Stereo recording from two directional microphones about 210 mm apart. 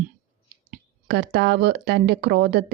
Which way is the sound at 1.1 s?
50° right (ahead or behind).